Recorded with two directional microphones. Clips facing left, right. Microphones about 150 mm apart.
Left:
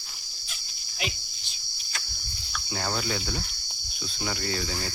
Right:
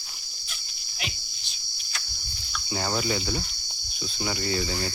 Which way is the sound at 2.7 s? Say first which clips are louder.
Right 3 dB; 5° right (ahead or behind).